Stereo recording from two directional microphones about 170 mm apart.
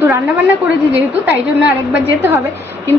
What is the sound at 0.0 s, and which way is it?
Speech, 10° right (ahead or behind).